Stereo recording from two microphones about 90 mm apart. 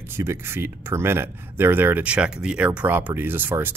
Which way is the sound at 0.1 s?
25° right (ahead or behind).